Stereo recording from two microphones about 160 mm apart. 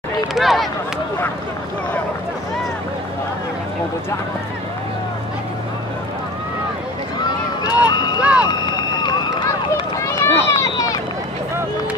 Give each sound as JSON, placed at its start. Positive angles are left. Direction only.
{"t": 0.3, "sound": "speech", "side_deg": 0}
{"t": 7.2, "sound": "run", "side_deg": 25}
{"t": 8.2, "sound": "run", "side_deg": -10}
{"t": 8.5, "sound": "run", "side_deg": 25}